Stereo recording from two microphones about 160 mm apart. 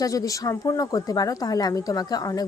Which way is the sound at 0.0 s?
20° left (ahead or behind).